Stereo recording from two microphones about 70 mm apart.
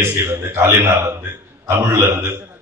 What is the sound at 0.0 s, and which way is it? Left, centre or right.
A man's voice, right.